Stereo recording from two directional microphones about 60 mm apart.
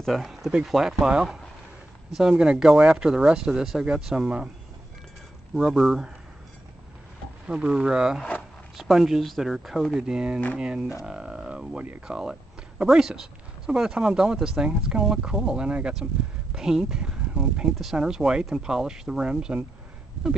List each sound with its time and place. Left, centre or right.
0.0 s speech: centre
5.7 s speech: centre
7.4 s speech: centre
9.9 s speech: centre